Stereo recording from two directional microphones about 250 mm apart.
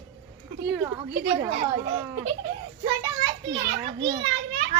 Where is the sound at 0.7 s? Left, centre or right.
Right.